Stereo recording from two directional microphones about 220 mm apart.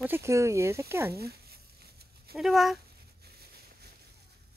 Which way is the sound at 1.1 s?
45° right (ahead or behind).